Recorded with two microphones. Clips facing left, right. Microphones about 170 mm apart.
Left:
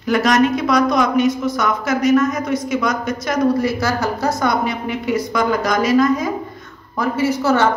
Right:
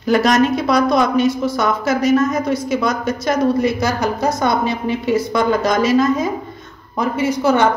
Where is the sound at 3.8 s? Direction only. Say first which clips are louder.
Right 1 dB; 20° right (ahead or behind).